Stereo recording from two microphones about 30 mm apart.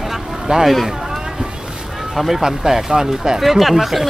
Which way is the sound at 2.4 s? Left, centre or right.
Centre.